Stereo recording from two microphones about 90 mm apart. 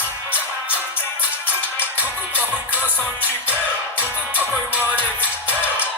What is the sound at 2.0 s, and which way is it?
Music, 15° right (ahead or behind).